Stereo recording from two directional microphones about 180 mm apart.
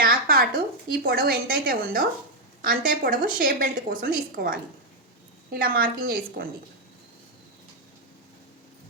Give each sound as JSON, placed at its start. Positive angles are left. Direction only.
{"t": 0.0, "sound": "a woman's voice", "side_deg": -55}